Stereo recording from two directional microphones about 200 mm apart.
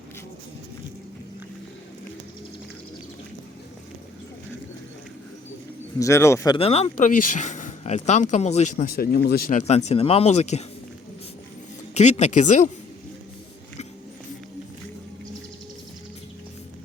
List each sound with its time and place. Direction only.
6.0 s speech: 15° left (ahead or behind)
6.6 s speech: 30° left (ahead or behind); by 9.6 s 50° left (ahead or behind)
9.6 s speech: 35° left (ahead or behind)
11.9 s speech: 35° left (ahead or behind)